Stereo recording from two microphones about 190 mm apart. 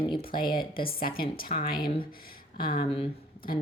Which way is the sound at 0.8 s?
50° left (ahead or behind).